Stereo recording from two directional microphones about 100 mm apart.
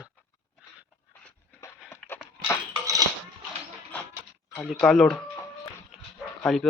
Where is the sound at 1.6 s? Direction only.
30° left (ahead or behind).